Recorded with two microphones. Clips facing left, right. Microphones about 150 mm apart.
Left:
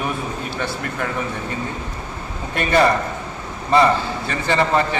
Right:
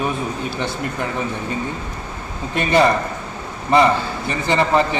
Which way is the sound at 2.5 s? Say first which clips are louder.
Right 1 dB; 20° right (ahead or behind).